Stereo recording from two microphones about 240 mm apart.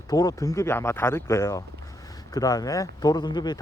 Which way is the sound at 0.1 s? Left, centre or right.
Centre.